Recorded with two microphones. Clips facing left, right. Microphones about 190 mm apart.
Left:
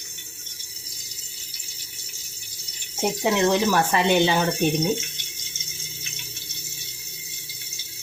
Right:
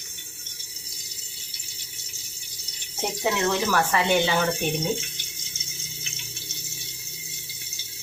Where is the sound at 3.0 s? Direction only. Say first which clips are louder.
Left 4 dB; 20° left (ahead or behind).